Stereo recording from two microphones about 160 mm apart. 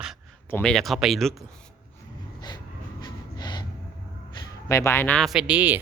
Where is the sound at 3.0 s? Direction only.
25° left (ahead or behind).